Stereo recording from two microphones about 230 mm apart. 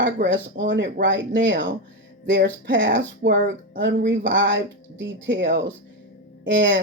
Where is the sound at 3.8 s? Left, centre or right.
Right.